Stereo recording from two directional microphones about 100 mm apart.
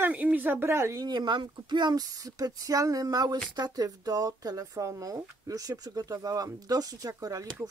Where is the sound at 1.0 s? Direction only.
45° right (ahead or behind).